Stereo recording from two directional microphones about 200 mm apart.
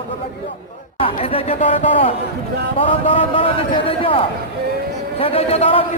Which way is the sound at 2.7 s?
25° left (ahead or behind).